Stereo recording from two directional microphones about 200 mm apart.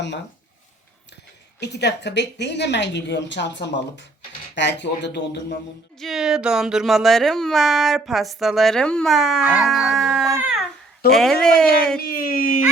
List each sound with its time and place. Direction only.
1.5 s a woman's voice: 55° left (ahead or behind)
6.0 s speech: centre (ahead or behind)
11.9 s speech: 45° left (ahead or behind)